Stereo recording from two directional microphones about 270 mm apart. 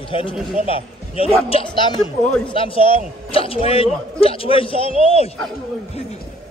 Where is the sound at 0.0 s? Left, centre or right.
Centre.